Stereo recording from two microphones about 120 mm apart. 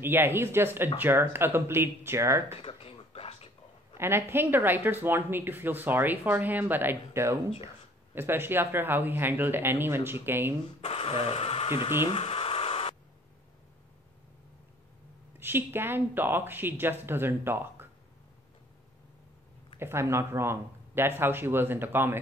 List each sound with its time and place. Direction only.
0.0 s speech: 20° right (ahead or behind)
2.6 s a sound: 50° left (ahead or behind)
3.9 s speech: 20° right (ahead or behind)
10.8 s speech: 55° left (ahead or behind)
12.0 s a sound: 55° left (ahead or behind)
15.3 s speech: 20° right (ahead or behind)
19.8 s speech: 20° right (ahead or behind)